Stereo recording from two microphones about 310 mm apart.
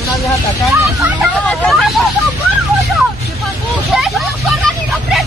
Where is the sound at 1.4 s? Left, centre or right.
Centre.